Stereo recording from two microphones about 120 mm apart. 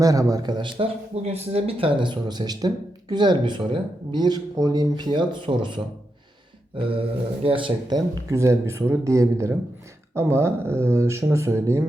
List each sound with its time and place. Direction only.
0.0 s speech: 30° right (ahead or behind)
1.1 s speech: 65° right (ahead or behind); by 5.8 s 40° right (ahead or behind)
7.4 s speech: 45° right (ahead or behind); by 11.8 s 20° right (ahead or behind)